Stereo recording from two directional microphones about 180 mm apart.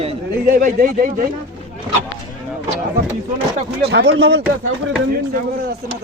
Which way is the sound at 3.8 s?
70° right (ahead or behind).